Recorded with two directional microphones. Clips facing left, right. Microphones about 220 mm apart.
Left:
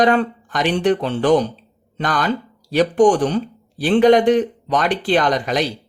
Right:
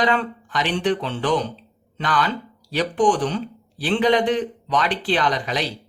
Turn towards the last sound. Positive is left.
turn(degrees=45)  # may be behind; listen again after turning